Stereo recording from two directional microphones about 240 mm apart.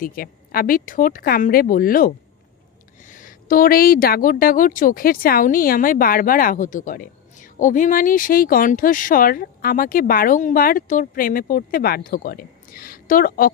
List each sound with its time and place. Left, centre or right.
0.0 s speech: left